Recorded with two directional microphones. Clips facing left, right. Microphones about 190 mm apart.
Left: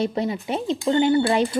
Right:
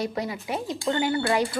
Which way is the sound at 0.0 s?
25° left (ahead or behind).